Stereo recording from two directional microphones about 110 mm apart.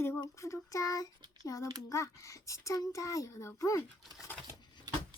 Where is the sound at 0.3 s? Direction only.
30° left (ahead or behind).